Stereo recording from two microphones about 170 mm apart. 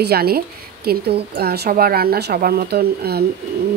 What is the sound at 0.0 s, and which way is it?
A woman's voice, 65° right (ahead or behind).